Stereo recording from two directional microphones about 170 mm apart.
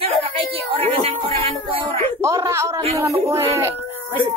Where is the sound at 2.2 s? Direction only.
15° right (ahead or behind).